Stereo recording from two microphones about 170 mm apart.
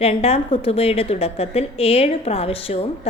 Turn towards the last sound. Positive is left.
turn(degrees=35)  # may be behind; listen again after turning